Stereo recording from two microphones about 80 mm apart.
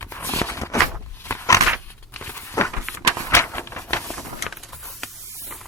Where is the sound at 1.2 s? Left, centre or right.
Left.